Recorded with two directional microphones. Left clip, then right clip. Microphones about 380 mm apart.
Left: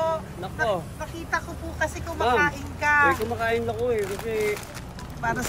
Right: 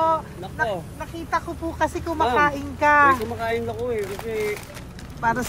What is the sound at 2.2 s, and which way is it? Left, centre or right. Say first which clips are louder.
Speech: right 1 dB; centre.